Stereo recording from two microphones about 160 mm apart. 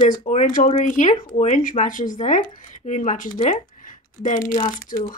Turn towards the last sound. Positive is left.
turn(degrees=60)  # may be behind; listen again after turning